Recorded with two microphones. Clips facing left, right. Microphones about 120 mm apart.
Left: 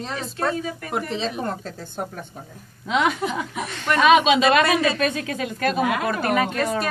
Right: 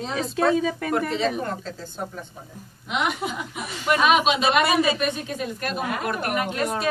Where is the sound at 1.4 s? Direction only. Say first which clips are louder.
Left 2 dB; 45° left (ahead or behind).